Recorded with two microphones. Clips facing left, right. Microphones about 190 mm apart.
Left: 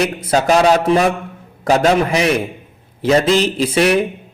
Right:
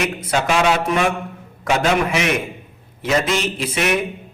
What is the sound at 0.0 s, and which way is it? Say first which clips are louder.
Speech: left 5 dB; 35° left (ahead or behind).